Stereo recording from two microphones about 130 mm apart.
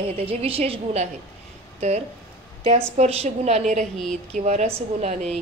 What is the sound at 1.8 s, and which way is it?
A woman's voice, 60° right (ahead or behind).